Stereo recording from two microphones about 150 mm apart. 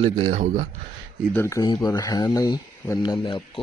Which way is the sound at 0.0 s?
45° right (ahead or behind).